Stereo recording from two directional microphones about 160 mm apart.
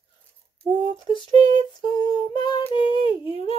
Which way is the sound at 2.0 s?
25° left (ahead or behind).